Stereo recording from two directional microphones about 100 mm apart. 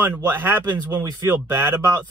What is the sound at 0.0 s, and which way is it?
Speech, 20° right (ahead or behind).